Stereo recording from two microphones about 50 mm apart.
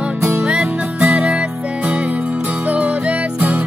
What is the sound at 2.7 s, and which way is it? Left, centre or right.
Music, right.